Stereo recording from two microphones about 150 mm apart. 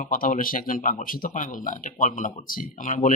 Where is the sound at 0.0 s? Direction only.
65° left (ahead or behind).